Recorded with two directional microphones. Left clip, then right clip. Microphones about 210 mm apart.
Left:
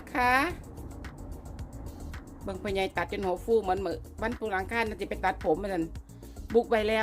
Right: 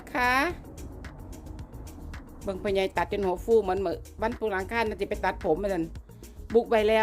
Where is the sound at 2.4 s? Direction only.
30° right (ahead or behind).